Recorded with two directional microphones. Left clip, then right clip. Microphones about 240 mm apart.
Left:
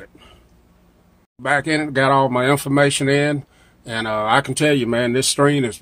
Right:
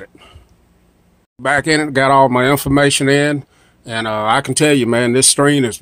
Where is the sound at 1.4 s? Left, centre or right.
Right.